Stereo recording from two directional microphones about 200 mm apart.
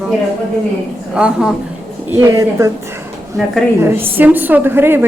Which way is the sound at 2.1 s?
15° right (ahead or behind).